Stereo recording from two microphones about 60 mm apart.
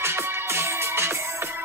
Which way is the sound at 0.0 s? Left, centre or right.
Right.